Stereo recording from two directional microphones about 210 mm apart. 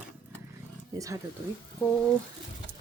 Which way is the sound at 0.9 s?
15° right (ahead or behind).